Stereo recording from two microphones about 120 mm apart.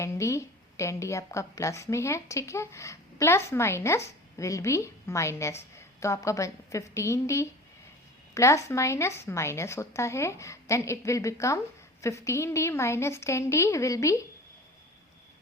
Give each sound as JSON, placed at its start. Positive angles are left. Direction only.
{"t": 0.0, "sound": "a woman's voice", "side_deg": 25}